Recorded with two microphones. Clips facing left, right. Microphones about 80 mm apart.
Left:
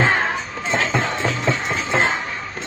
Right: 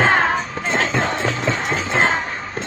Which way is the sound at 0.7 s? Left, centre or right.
Right.